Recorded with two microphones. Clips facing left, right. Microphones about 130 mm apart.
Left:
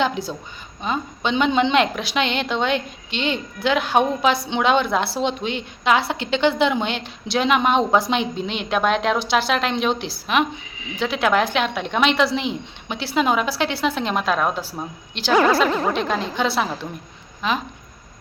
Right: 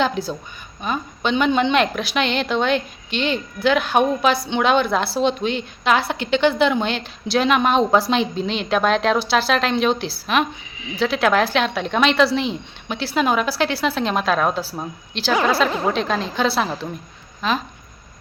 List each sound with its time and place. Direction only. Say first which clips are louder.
0.0 s a woman's voice: right 1 dB; 20° left (ahead or behind)